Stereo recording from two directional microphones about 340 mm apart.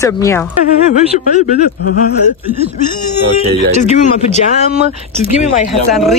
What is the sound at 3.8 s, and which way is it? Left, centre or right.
Speech, centre.